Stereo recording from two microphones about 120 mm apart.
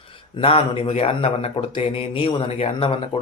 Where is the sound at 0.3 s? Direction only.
50° left (ahead or behind).